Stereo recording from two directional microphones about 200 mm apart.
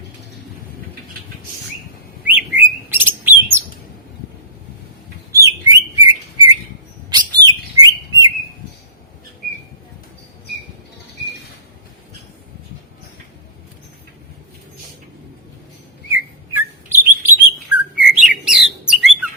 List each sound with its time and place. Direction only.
2.2 s bird: 10° right (ahead or behind)
5.3 s bird: 15° right (ahead or behind)
7.1 s chirp: 20° right (ahead or behind)
16.1 s bird: 10° right (ahead or behind)